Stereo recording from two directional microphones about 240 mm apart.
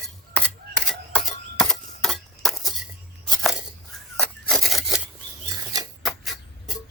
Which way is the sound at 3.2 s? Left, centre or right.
Centre.